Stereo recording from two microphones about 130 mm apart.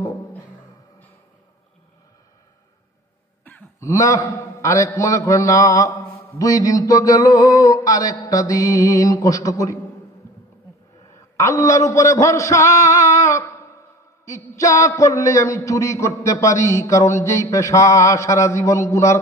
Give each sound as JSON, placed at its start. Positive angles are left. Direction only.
{"t": 3.5, "sound": "throat clearing", "side_deg": 15}
{"t": 3.8, "sound": "a man's voice", "side_deg": 25}
{"t": 10.2, "sound": "insect", "side_deg": 20}
{"t": 11.1, "sound": "a man's voice", "side_deg": 25}